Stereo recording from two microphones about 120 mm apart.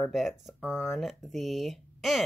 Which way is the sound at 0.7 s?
20° left (ahead or behind).